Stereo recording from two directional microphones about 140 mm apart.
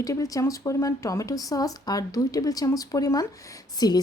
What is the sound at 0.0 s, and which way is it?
Speech, 25° left (ahead or behind).